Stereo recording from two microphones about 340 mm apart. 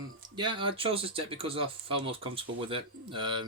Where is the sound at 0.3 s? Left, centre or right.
Centre.